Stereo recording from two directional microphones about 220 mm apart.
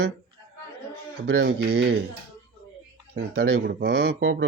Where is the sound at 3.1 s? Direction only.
50° right (ahead or behind).